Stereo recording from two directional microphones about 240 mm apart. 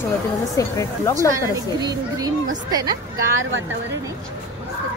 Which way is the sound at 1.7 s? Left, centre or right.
Centre.